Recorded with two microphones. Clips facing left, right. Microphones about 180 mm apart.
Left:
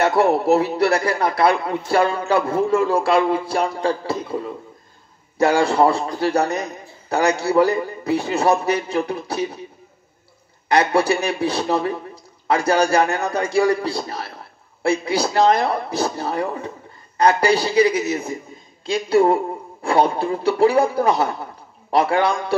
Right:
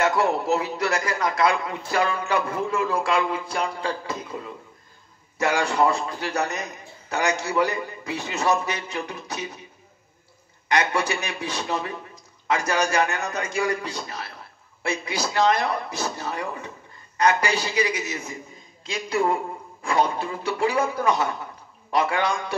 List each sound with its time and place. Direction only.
0.0 s a man's voice: 35° left (ahead or behind)
5.4 s a man's voice: 35° left (ahead or behind)
10.7 s a man's voice: 35° left (ahead or behind)